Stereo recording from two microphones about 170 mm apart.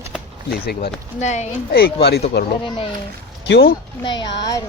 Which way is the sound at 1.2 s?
45° left (ahead or behind).